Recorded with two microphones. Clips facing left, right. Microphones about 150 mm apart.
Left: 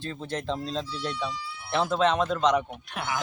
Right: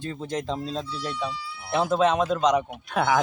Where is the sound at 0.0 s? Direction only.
10° right (ahead or behind).